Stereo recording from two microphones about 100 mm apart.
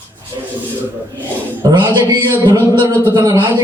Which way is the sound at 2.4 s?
35° right (ahead or behind).